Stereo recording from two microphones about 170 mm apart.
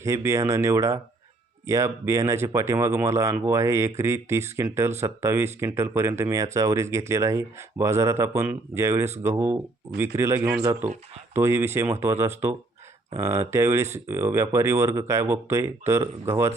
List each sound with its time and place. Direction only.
0.0 s speech: 15° right (ahead or behind)